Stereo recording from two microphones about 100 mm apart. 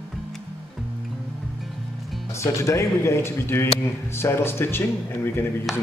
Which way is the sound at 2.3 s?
30° left (ahead or behind).